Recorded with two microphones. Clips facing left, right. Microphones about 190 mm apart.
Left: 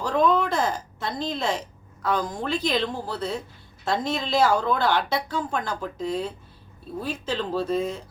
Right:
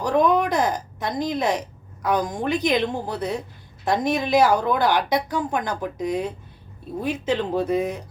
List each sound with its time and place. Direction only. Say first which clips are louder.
0.0 s speech: right 2 dB; 15° right (ahead or behind)